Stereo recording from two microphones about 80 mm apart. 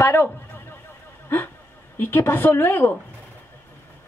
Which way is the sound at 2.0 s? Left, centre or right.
Left.